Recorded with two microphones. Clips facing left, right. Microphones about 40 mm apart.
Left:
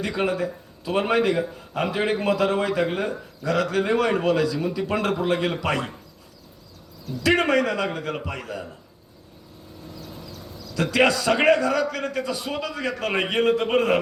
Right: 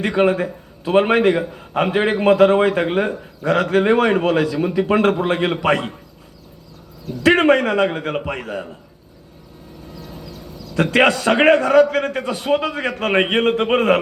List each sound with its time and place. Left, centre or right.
0.0 s a man's voice: right
7.2 s a man's voice: right
10.8 s a man's voice: right